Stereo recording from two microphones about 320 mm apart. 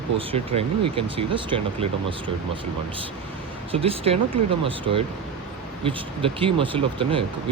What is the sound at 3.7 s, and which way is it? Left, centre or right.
Speech, centre.